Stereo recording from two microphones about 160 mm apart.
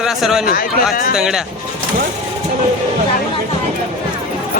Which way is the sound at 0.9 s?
65° left (ahead or behind).